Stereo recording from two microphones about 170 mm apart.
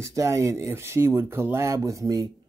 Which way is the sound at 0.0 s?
20° right (ahead or behind).